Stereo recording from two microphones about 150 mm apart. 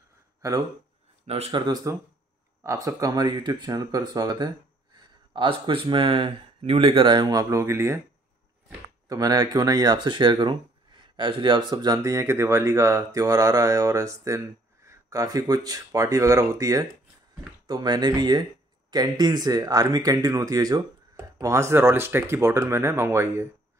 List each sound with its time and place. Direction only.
1.2 s speech: 45° right (ahead or behind)
1.9 s speech: 20° right (ahead or behind)
9.1 s speech: 25° right (ahead or behind)